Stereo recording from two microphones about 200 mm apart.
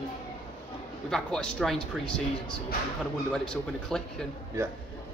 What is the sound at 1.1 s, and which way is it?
A man's voice, 5° left (ahead or behind).